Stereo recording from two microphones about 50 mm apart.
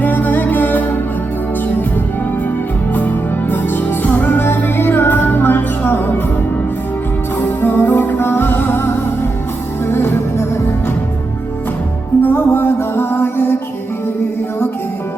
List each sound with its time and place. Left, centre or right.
0.0 s music: left
3.5 s music: left
7.4 s music: left
9.9 s music: left
12.2 s music: left